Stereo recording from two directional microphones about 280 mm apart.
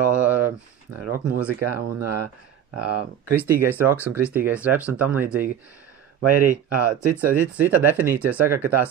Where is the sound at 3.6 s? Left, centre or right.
Centre.